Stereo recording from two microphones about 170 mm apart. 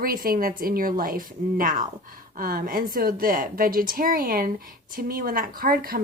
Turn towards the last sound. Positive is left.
turn(degrees=-60)  # may be behind; listen again after turning